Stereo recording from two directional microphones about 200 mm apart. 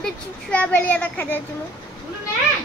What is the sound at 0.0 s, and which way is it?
A child's voice, 5° left (ahead or behind).